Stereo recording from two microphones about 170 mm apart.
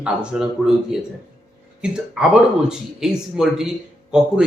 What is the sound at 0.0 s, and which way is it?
A man's voice, 5° right (ahead or behind).